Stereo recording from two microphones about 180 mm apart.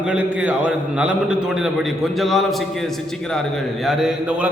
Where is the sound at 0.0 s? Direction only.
5° right (ahead or behind).